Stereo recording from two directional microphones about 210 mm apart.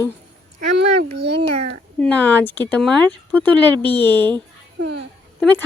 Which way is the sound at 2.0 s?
5° left (ahead or behind).